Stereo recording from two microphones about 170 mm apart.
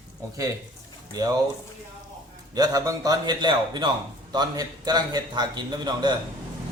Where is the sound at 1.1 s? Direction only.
20° right (ahead or behind).